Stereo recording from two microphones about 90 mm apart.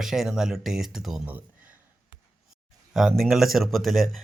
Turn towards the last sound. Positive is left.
turn(degrees=0)  # may be behind; listen again after turning